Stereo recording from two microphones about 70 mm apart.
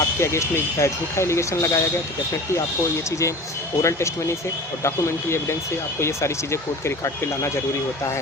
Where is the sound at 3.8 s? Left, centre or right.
Left.